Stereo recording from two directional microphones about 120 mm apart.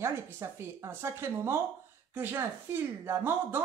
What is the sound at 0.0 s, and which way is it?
Speech, 20° right (ahead or behind).